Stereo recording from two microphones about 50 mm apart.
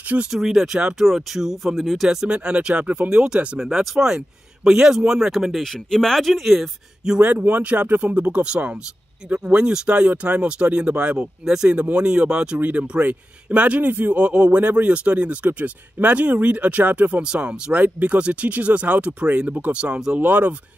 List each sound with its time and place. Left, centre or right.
0.3 s speech: centre
2.0 s a man's voice: centre
3.1 s speech: centre
5.6 s speech: centre
7.2 s a man's voice: right
11.4 s speech: centre
11.7 s a man's voice: right
12.5 s speech: right
12.8 s a man's voice: right
17.2 s a man's voice: right
17.7 s a man's voice: right